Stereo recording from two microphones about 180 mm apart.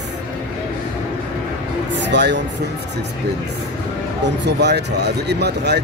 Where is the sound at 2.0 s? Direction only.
75° right (ahead or behind).